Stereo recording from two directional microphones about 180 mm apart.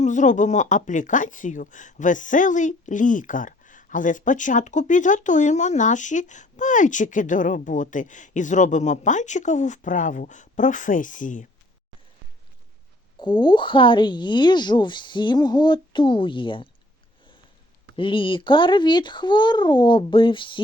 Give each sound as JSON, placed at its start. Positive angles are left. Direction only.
{"t": 0.0, "sound": "speech", "side_deg": 45}
{"t": 13.1, "sound": "speech", "side_deg": 25}
{"t": 17.9, "sound": "speech", "side_deg": 30}